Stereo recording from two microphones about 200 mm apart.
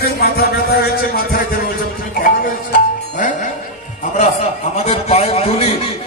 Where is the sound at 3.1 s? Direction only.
40° left (ahead or behind).